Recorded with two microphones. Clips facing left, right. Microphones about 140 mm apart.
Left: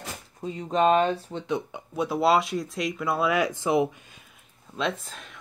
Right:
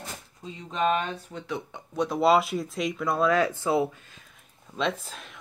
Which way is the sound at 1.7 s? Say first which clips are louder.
Even; 5° left (ahead or behind).